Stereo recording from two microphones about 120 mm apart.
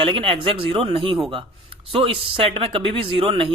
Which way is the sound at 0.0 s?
50° right (ahead or behind).